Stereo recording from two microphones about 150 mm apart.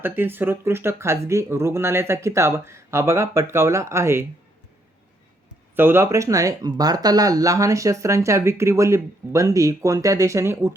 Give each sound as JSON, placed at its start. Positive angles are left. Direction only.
{"t": 0.0, "sound": "speech", "side_deg": -15}
{"t": 5.7, "sound": "speech", "side_deg": -15}